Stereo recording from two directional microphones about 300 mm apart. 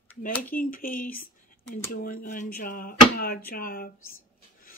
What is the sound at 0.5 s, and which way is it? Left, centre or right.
Speech, left.